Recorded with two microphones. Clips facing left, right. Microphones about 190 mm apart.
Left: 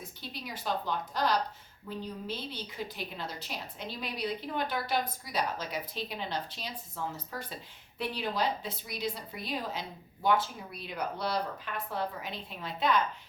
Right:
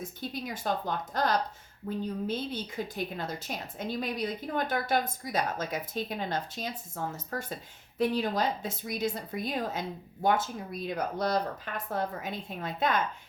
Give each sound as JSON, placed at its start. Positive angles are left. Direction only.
{"t": 0.0, "sound": "a woman's voice", "side_deg": -50}